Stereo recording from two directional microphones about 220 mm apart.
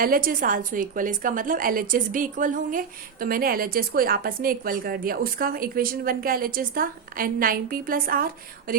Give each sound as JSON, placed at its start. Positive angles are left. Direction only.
{"t": 0.0, "sound": "a woman's voice", "side_deg": -40}